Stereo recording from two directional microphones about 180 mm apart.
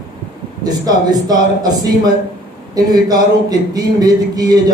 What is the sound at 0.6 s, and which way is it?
Speech, 20° right (ahead or behind).